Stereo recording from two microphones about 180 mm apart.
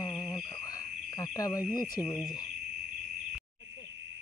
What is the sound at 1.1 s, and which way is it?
Speech, 20° left (ahead or behind).